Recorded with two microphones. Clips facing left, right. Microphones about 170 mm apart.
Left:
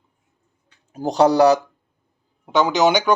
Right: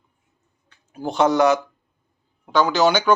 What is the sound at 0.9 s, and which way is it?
Speech, 40° left (ahead or behind).